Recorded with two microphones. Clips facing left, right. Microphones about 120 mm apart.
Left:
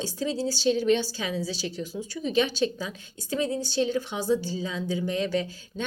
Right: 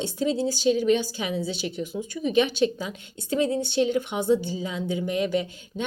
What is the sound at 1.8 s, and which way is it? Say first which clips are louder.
Speech: right 3 dB; 55° right (ahead or behind).